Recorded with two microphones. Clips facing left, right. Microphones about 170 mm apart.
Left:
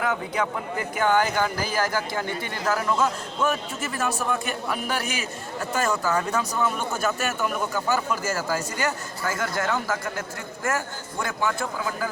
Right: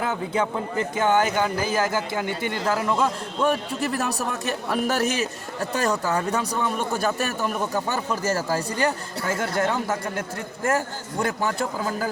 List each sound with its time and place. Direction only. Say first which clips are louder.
0.0 s a man's voice: right 1 dB; 25° right (ahead or behind)